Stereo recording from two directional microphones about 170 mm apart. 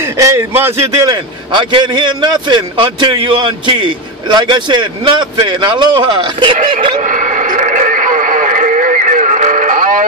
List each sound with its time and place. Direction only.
0.0 s a man's voice: 15° right (ahead or behind)
6.7 s radio: 35° right (ahead or behind); by 10.0 s 50° right (ahead or behind)